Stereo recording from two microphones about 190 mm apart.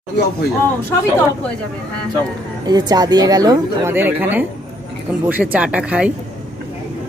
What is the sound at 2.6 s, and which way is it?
A woman's voice, 20° right (ahead or behind).